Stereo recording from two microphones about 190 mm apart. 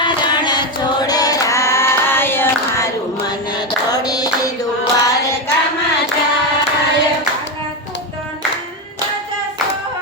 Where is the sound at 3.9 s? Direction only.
20° left (ahead or behind).